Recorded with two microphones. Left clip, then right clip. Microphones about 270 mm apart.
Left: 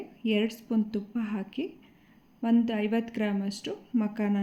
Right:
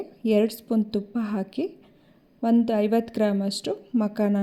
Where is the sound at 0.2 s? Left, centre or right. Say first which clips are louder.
Right 7 dB; right.